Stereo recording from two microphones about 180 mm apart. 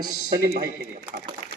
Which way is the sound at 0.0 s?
15° right (ahead or behind).